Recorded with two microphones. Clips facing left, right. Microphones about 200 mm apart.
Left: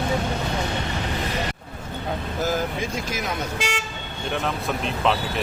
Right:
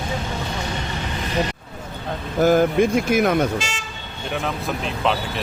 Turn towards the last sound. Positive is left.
turn(degrees=60)  # may be behind; listen again after turning